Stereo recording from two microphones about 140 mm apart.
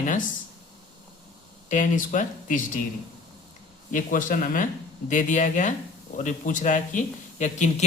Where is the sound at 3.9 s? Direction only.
70° left (ahead or behind).